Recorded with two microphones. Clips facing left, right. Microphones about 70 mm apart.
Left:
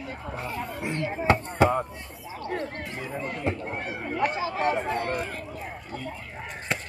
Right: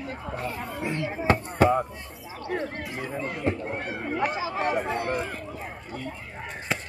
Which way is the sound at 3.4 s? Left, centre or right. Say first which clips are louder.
Right 3 dB; centre.